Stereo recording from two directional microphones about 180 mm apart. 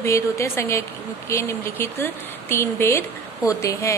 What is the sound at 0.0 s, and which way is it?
A woman's voice, 15° left (ahead or behind).